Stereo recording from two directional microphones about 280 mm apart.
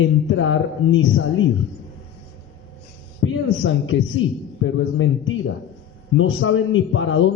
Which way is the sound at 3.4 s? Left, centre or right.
Left.